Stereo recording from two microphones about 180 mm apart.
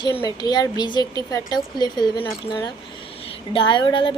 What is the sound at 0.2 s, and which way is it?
Speech, 20° left (ahead or behind).